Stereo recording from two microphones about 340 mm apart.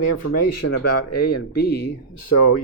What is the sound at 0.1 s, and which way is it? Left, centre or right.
Speech, left.